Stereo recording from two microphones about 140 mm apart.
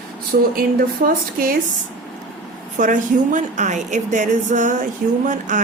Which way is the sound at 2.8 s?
65° right (ahead or behind).